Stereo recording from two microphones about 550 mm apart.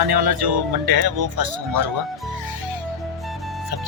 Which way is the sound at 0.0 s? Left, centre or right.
Right.